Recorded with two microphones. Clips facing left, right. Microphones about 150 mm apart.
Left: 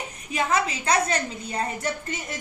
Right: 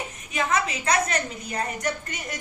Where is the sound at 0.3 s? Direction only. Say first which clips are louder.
Left 1 dB; 30° left (ahead or behind).